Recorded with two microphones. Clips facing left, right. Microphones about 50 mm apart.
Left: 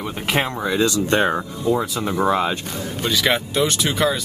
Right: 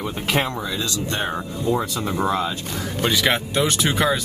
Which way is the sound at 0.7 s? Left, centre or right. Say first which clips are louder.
Left 7 dB; left.